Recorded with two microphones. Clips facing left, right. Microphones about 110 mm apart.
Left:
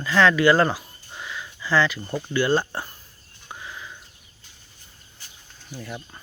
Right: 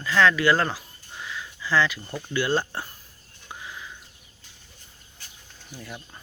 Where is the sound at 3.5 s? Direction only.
Centre (ahead or behind).